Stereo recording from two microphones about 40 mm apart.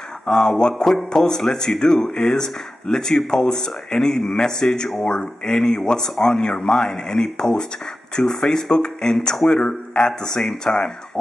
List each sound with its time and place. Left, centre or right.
0.3 s speech: centre
0.8 s speech: centre; by 10.0 s left
10.2 s speech: centre